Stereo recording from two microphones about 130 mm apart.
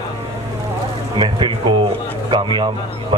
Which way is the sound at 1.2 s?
40° right (ahead or behind).